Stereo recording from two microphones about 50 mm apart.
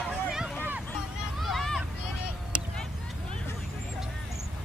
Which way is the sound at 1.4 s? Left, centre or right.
Centre.